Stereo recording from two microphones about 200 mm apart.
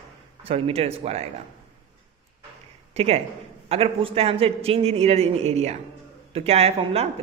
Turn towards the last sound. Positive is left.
turn(degrees=-30)  # may be behind; listen again after turning